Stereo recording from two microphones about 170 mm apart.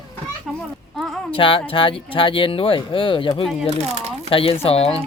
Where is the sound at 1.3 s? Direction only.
30° left (ahead or behind).